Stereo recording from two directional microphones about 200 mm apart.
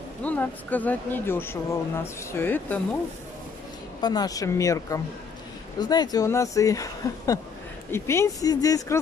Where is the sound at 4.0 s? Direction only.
20° left (ahead or behind).